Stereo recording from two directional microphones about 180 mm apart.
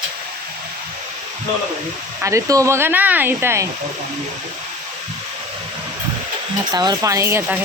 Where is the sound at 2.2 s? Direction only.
15° right (ahead or behind).